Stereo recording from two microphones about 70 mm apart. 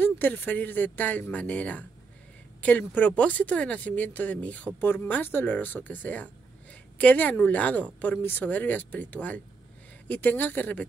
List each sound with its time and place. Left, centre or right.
0.0 s speech: left
2.9 s speech: centre